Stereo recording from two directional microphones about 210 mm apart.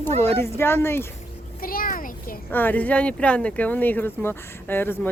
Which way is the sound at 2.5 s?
10° left (ahead or behind).